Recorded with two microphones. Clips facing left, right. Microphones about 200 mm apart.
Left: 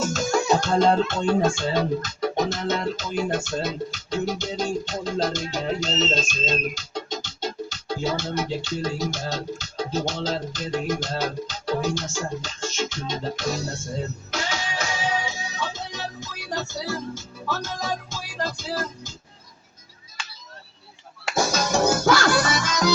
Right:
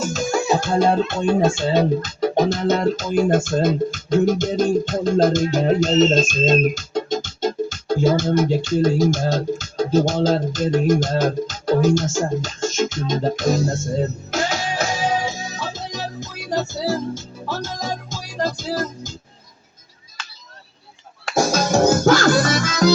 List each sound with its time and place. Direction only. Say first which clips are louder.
0.0 s speech: right 2 dB; 10° right (ahead or behind); by 13.7 s 45° right (ahead or behind)
14.3 s music: right 6 dB; 40° right (ahead or behind)
21.3 s music: right 5 dB; 45° right (ahead or behind)